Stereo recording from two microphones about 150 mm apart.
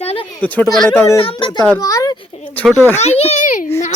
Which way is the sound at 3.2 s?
50° left (ahead or behind).